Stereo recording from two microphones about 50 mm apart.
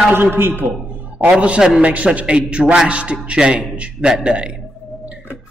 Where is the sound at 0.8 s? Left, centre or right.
Right.